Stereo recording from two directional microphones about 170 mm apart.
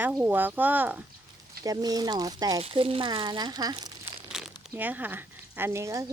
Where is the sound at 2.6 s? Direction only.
30° right (ahead or behind).